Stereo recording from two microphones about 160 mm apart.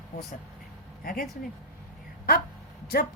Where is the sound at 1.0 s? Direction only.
65° left (ahead or behind).